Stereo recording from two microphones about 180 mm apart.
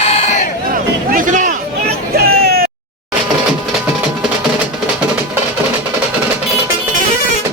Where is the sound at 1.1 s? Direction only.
45° right (ahead or behind).